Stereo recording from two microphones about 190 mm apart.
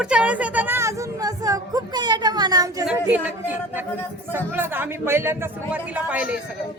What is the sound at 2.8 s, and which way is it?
Speech, 10° right (ahead or behind).